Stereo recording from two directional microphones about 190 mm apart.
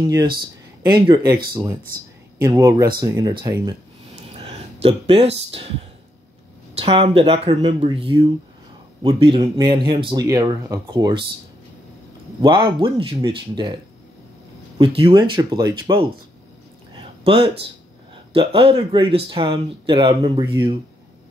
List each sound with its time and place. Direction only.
0.0 s speech: 20° right (ahead or behind)
4.1 s a sound: 30° right (ahead or behind)
6.7 s speech: 30° right (ahead or behind)
12.4 s speech: 25° right (ahead or behind)
14.8 s speech: 30° right (ahead or behind)
16.9 s a sound: 30° right (ahead or behind)
18.3 s speech: 25° right (ahead or behind)